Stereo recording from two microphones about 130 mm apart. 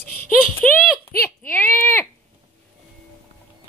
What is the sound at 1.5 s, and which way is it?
Speech, 15° left (ahead or behind).